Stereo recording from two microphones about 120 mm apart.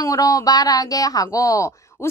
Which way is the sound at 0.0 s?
30° left (ahead or behind).